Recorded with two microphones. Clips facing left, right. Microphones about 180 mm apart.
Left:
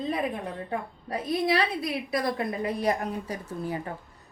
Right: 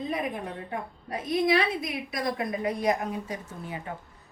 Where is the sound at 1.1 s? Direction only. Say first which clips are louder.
Right 1 dB; 30° left (ahead or behind).